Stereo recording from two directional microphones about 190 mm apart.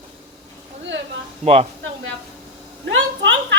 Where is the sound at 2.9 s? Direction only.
70° right (ahead or behind).